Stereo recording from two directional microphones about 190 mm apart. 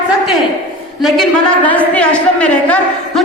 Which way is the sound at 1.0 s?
5° left (ahead or behind).